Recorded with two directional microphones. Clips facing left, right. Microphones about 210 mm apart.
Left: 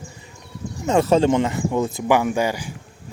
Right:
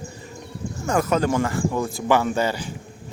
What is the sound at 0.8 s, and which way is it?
Speech, 25° left (ahead or behind).